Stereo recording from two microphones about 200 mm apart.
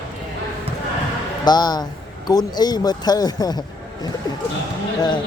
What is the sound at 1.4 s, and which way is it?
Speech, 20° left (ahead or behind).